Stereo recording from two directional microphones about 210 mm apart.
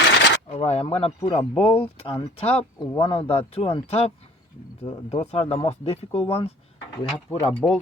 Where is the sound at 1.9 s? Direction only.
25° left (ahead or behind).